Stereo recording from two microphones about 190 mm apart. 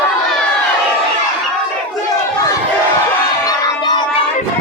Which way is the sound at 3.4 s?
20° left (ahead or behind).